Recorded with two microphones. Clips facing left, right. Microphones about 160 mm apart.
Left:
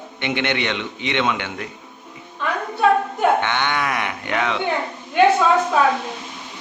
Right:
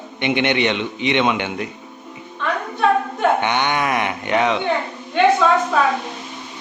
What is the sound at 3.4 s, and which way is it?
Speech, 15° right (ahead or behind).